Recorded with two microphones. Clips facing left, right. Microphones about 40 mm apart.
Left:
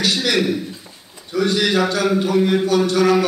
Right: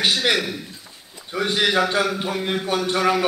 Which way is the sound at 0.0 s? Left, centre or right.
Right.